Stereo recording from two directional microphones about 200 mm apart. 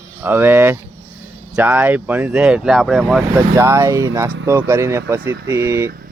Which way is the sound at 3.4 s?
15° right (ahead or behind).